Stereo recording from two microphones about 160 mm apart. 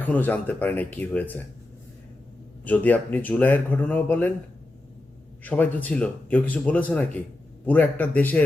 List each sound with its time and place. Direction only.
0.0 s speech: 10° left (ahead or behind)
2.6 s speech: 10° left (ahead or behind)
5.4 s speech: 10° left (ahead or behind)